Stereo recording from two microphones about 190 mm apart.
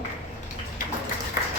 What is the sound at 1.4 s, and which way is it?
Applause, 50° left (ahead or behind).